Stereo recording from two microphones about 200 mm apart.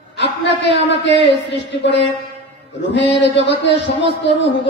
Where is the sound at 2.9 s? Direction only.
60° left (ahead or behind).